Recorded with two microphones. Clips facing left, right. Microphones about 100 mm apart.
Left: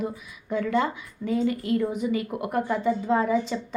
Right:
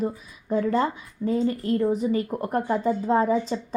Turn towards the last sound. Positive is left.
turn(degrees=-35)  # may be behind; listen again after turning